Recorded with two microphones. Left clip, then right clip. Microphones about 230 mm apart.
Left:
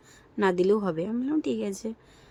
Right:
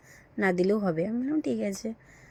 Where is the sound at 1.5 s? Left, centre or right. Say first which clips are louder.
Even; left.